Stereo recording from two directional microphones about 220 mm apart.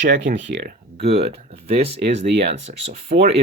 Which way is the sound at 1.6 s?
45° right (ahead or behind).